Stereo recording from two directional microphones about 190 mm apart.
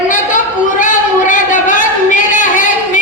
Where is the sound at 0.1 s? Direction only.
45° left (ahead or behind).